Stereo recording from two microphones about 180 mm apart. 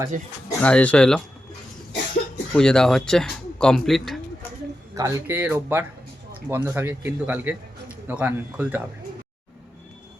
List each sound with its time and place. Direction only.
0.1 s speech: 45° right (ahead or behind)
0.6 s speech: 10° left (ahead or behind)
2.5 s speech: 5° left (ahead or behind)
4.9 s speech: 15° right (ahead or behind)